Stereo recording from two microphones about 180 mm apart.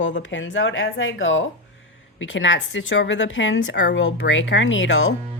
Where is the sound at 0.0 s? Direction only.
90° left.